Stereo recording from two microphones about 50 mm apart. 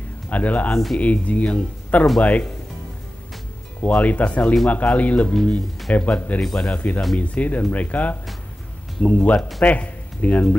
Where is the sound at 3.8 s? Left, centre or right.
Left.